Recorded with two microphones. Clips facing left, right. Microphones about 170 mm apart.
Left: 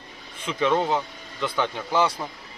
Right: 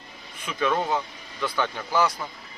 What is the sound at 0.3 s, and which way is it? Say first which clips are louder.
Speech: left 3 dB; 25° left (ahead or behind).